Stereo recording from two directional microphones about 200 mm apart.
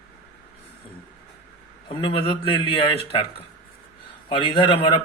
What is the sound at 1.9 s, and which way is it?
Speech, 25° left (ahead or behind).